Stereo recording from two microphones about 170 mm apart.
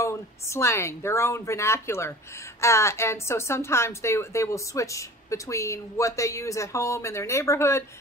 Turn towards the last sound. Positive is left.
turn(degrees=15)  # may be behind; listen again after turning